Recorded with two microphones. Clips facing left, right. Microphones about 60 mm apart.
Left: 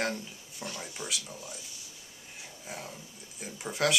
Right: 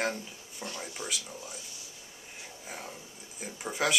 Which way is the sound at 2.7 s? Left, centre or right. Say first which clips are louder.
Left 1 dB; centre.